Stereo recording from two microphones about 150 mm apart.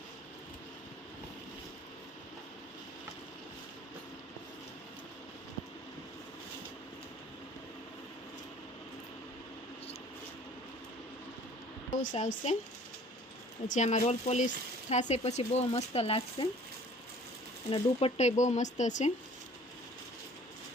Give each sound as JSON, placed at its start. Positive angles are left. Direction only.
{"t": 12.1, "sound": "speech", "side_deg": 50}
{"t": 13.7, "sound": "speech", "side_deg": 50}
{"t": 17.7, "sound": "speech", "side_deg": 45}